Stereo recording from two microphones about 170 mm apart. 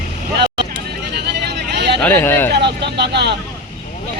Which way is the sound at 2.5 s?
80° right.